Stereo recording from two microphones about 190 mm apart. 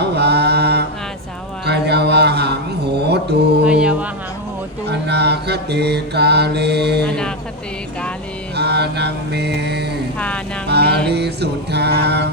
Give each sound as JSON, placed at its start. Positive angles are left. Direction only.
{"t": 0.0, "sound": "mantra", "side_deg": -60}
{"t": 1.6, "sound": "a sound", "side_deg": -60}
{"t": 3.6, "sound": "music", "side_deg": -5}
{"t": 4.9, "sound": "mantra", "side_deg": -60}
{"t": 7.0, "sound": "speech", "side_deg": 5}
{"t": 8.5, "sound": "mantra", "side_deg": -60}
{"t": 10.2, "sound": "vehicle", "side_deg": 5}
{"t": 10.7, "sound": "mantra", "side_deg": -60}
{"t": 11.1, "sound": "music", "side_deg": -60}